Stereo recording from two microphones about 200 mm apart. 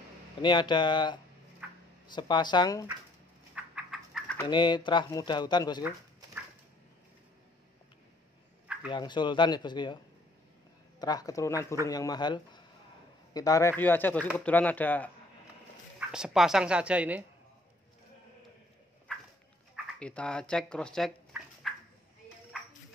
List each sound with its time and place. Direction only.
0.4 s speech: 20° left (ahead or behind)
1.6 s a sound: 5° right (ahead or behind)
2.0 s speech: 20° left (ahead or behind)
3.5 s bird: 5° right (ahead or behind)
4.4 s speech: 20° left (ahead or behind)
5.8 s dog: 10° right (ahead or behind)
8.8 s speech: 20° left (ahead or behind)
11.0 s speech: 20° left (ahead or behind)
16.1 s speech: 5° right (ahead or behind)
20.0 s speech: 5° left (ahead or behind)